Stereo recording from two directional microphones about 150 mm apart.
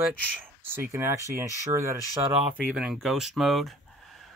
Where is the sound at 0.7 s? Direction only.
15° right (ahead or behind).